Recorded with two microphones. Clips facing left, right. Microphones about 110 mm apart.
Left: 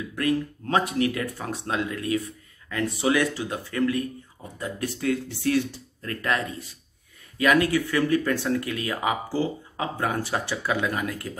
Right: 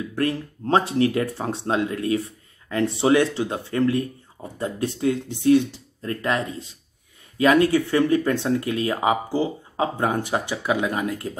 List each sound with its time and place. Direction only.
0.1 s speech: 30° right (ahead or behind)